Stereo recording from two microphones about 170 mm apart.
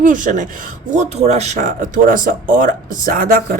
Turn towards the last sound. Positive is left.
turn(degrees=-55)  # may be behind; listen again after turning